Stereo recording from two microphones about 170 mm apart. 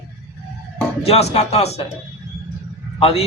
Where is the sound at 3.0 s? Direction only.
35° left (ahead or behind).